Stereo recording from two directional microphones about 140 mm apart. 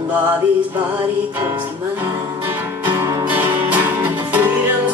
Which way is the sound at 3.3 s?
10° right (ahead or behind).